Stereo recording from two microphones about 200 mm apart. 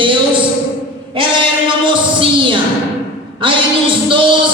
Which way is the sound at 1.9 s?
25° right (ahead or behind).